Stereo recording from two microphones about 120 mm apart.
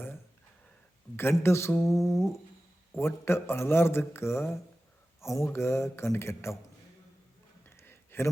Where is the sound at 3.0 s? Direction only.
20° left (ahead or behind).